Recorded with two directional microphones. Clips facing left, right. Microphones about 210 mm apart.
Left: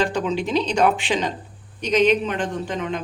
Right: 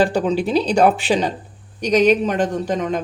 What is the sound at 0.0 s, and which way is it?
Speech, 35° right (ahead or behind).